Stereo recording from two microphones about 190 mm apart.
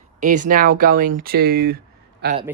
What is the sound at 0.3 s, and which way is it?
Speech, 45° right (ahead or behind).